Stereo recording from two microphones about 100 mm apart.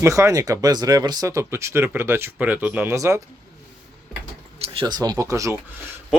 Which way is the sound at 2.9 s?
30° right (ahead or behind).